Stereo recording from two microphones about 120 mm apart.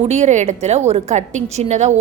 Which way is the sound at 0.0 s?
70° right (ahead or behind).